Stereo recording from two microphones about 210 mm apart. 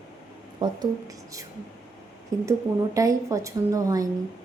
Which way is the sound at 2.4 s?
15° right (ahead or behind).